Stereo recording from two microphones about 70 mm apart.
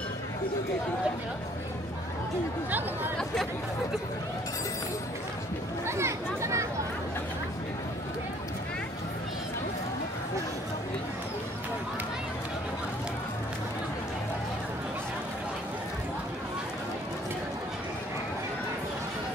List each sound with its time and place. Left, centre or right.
5.9 s speech: right